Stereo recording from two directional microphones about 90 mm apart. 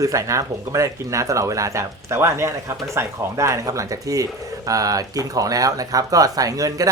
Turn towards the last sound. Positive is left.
turn(degrees=-40)  # may be behind; listen again after turning